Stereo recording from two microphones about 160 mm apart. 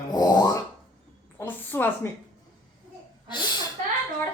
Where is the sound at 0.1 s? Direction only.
25° left (ahead or behind).